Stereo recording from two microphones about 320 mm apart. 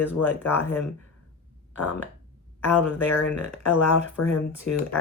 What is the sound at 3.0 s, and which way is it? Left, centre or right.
Speech, centre.